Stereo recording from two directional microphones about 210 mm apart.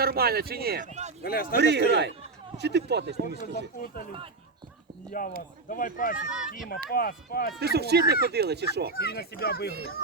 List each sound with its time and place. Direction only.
0.0 s speech: 45° right (ahead or behind)
1.2 s speech: 45° left (ahead or behind)
1.5 s speech: 55° right (ahead or behind)
3.4 s speech: 45° left (ahead or behind)
5.2 s speech: 40° left (ahead or behind)
6.1 s speech: 5° right (ahead or behind)
6.7 s speech: 45° left (ahead or behind)
7.6 s speech: 50° right (ahead or behind)
9.0 s speech: 50° left (ahead or behind)